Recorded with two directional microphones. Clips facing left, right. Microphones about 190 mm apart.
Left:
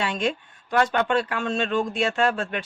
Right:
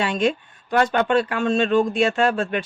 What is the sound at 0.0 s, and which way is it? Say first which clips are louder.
Speech: right 5 dB; 15° right (ahead or behind).